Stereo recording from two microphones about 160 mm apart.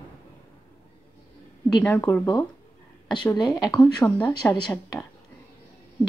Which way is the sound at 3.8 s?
5° left (ahead or behind).